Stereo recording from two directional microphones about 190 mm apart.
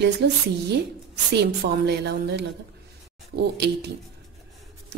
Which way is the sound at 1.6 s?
60° right (ahead or behind).